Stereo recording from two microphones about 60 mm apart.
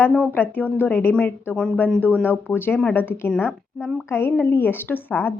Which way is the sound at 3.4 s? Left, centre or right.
Centre.